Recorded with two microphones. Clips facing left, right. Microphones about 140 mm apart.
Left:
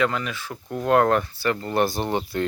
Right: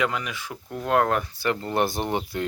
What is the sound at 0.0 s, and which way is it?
Speech, 10° right (ahead or behind).